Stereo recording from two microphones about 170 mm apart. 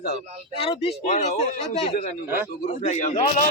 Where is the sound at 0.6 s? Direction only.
35° left (ahead or behind).